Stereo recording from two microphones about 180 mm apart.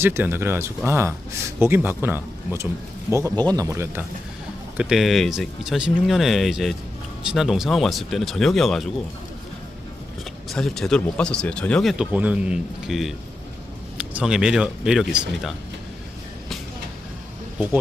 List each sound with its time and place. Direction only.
0.0 s speech: 10° right (ahead or behind)
4.8 s speech: centre (ahead or behind)
10.5 s speech: centre (ahead or behind)